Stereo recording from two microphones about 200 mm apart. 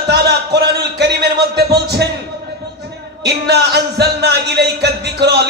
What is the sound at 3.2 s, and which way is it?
Speech, 55° right (ahead or behind).